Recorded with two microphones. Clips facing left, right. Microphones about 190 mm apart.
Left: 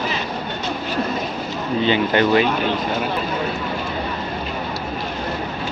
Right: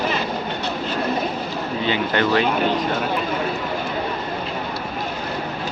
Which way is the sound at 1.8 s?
20° left (ahead or behind).